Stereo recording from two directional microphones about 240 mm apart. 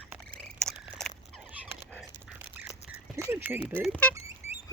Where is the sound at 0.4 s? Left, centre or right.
Centre.